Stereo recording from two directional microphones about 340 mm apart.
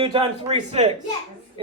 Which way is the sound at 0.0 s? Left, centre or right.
Centre.